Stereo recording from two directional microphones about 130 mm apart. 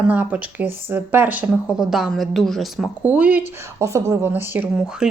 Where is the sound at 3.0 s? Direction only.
10° right (ahead or behind).